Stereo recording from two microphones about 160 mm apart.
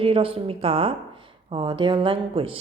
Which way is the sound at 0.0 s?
35° right (ahead or behind).